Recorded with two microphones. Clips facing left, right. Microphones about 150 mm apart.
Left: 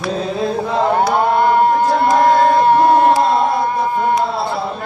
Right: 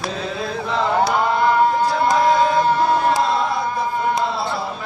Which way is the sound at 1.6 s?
60° left (ahead or behind).